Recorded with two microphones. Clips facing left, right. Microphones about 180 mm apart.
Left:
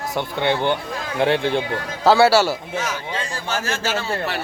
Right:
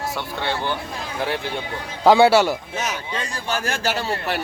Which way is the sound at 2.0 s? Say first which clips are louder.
Right 1 dB; 15° right (ahead or behind).